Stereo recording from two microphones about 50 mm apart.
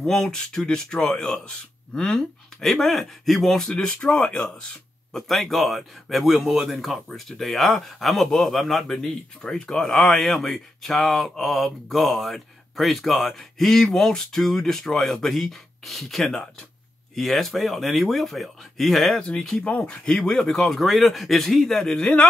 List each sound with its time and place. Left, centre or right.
0.0 s a man's voice: centre
3.7 s speech: left
5.1 s speech: centre
19.2 s a man's voice: centre